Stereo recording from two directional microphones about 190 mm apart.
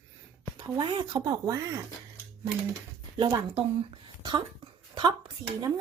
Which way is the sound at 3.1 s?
25° right (ahead or behind).